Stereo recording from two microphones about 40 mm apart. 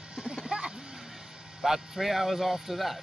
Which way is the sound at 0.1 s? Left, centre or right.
Right.